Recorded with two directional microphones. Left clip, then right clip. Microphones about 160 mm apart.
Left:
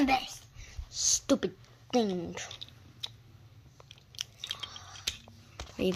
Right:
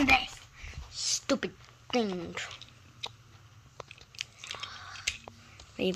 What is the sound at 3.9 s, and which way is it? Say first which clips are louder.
Biting: left 1 dB; 60° left (ahead or behind).